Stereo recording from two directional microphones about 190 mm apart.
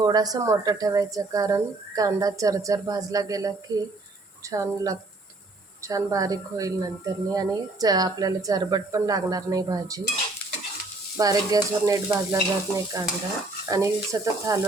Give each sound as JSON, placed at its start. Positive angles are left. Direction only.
{"t": 0.0, "sound": "a woman's voice", "side_deg": -20}
{"t": 4.4, "sound": "stir", "side_deg": -15}
{"t": 5.8, "sound": "a woman's voice", "side_deg": -20}
{"t": 11.2, "sound": "stir", "side_deg": -20}